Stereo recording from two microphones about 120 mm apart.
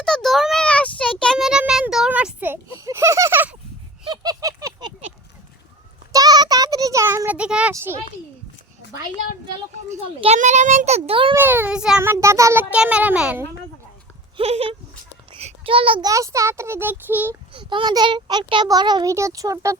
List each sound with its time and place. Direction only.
0.0 s a sound: 5° left (ahead or behind)
1.2 s child singing: centre (ahead or behind); by 2.6 s 15° right (ahead or behind)
2.7 s a sound: 25° right (ahead or behind)
4.0 s a sound: 35° right (ahead or behind)
6.1 s child singing: 35° right (ahead or behind)
7.3 s child singing: 10° right (ahead or behind)
7.7 s a child's voice: 25° right (ahead or behind)
9.9 s a child's voice: 80° right; by 11.3 s 50° right (ahead or behind)
11.3 s a child's voice: 15° right (ahead or behind)
12.7 s a child's voice: 10° right (ahead or behind)
14.3 s speech: 55° right (ahead or behind)
15.4 s a sound: 55° right (ahead or behind)
16.0 s a child's voice: 25° right (ahead or behind)
17.5 s a child's voice: 45° right (ahead or behind)